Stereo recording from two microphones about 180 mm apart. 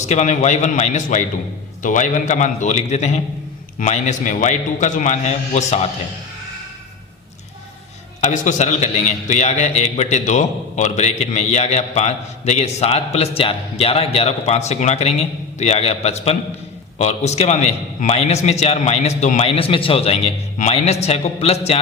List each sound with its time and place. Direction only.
0.0 s a man's voice: 40° left (ahead or behind)
8.2 s a man's voice: 40° left (ahead or behind)